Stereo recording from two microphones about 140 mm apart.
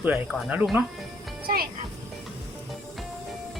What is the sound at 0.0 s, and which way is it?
Speech, 10° right (ahead or behind).